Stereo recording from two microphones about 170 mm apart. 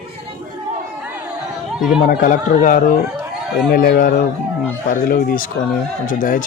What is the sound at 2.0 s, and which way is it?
Speech, 55° left (ahead or behind).